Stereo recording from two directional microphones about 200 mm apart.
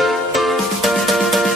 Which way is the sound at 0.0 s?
Centre (ahead or behind).